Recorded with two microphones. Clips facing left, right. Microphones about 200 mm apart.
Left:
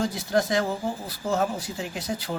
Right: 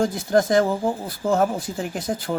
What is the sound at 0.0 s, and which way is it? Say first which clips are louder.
Speech: right 5 dB; 50° right (ahead or behind).